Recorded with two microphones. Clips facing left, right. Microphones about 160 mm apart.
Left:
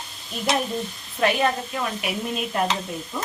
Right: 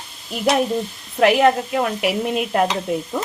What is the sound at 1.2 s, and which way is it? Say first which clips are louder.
A woman's voice: right 7 dB; 80° right.